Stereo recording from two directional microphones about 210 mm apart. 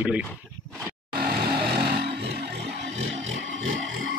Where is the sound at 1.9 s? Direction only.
50° right (ahead or behind).